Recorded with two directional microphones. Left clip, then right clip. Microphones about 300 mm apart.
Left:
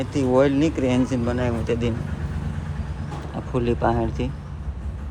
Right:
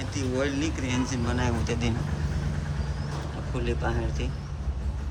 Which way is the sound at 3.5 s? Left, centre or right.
Centre.